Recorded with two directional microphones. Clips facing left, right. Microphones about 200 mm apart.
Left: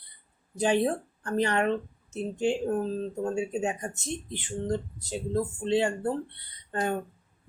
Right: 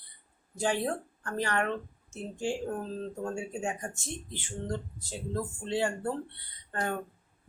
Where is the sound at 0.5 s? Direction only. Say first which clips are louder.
Left 5 dB; 20° left (ahead or behind).